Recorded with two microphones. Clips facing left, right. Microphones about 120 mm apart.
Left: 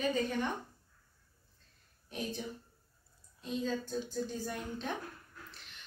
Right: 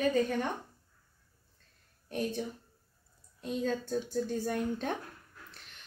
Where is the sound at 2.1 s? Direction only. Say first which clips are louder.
Right 5 dB; 50° right (ahead or behind).